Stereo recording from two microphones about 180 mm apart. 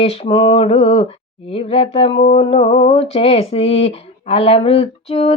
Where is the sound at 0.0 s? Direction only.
35° left (ahead or behind).